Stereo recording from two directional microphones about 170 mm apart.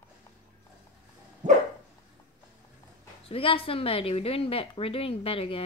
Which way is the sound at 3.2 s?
35° left (ahead or behind).